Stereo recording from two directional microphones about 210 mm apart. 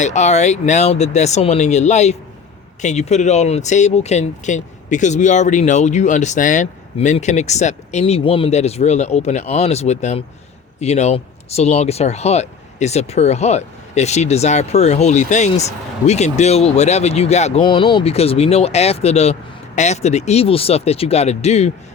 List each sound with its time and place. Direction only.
0.0 s speech: 35° left (ahead or behind)